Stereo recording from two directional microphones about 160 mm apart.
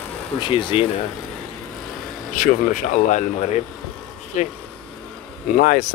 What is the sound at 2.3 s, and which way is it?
Speech, 55° left (ahead or behind).